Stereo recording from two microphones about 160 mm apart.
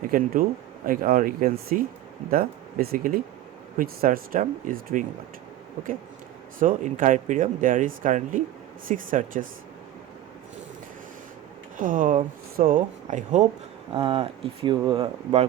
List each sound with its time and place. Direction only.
0.0 s speech: 60° right (ahead or behind)
6.6 s speech: 55° right (ahead or behind)
11.9 s speech: 55° right (ahead or behind)
13.9 s speech: 35° right (ahead or behind)